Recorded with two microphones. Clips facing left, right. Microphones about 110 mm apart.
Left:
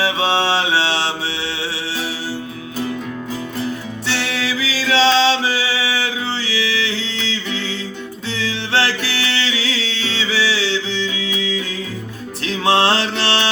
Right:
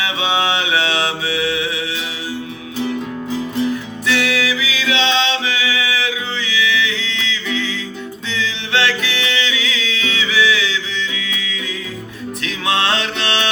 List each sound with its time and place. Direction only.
0.0 s mantra: 35° left (ahead or behind)
3.6 s music: 30° left (ahead or behind)